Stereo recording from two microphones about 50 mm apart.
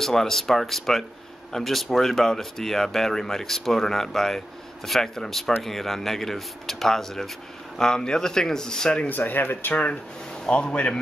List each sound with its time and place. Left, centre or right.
0.0 s speech: centre
9.1 s speech: left
10.4 s speech: left